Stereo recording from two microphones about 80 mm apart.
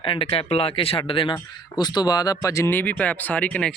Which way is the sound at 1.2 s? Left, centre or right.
Left.